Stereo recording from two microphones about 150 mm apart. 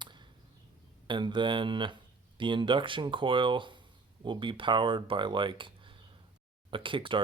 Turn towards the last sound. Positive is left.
turn(degrees=-35)  # may be behind; listen again after turning